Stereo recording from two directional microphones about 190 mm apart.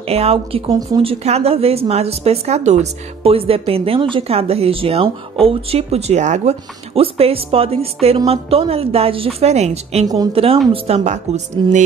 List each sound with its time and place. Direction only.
0.1 s speech: 30° right (ahead or behind)
10.0 s a woman's voice: 20° right (ahead or behind)
10.3 s speech: 30° right (ahead or behind)